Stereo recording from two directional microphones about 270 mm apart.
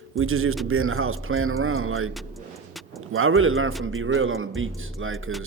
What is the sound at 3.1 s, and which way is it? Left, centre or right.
Speech, right.